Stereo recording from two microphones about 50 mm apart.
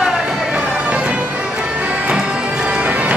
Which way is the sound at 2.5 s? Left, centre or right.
Right.